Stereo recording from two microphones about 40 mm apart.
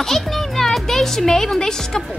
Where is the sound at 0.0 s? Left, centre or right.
Centre.